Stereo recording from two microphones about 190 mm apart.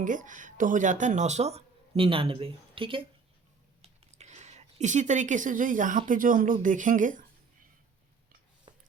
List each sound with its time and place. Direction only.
0.0 s speech: 45° right (ahead or behind)